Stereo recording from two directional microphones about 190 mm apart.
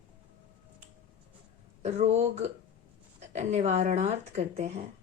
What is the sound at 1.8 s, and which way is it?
Speech, 35° right (ahead or behind).